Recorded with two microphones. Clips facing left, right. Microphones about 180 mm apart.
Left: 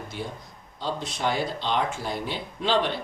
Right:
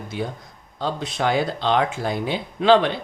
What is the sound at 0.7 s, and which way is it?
Speech, 55° right (ahead or behind).